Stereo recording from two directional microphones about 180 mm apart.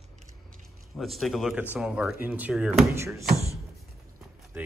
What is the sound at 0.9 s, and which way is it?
Speech, centre (ahead or behind).